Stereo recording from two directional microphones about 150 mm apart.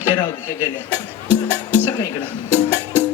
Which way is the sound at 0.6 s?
15° right (ahead or behind).